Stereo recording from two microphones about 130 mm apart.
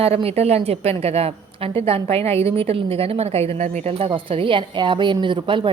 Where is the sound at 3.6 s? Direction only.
65° right (ahead or behind); by 5.6 s 40° right (ahead or behind).